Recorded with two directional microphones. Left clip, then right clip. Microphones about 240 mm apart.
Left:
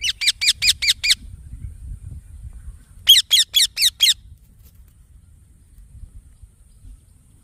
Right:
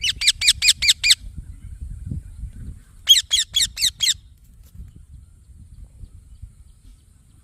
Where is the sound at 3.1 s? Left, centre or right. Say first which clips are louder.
Left 3 dB; left.